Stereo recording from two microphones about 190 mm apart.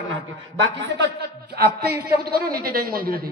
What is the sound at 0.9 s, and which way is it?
A woman's voice, 65° right (ahead or behind).